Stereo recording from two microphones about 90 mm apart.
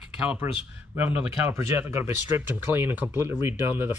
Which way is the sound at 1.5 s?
30° right (ahead or behind).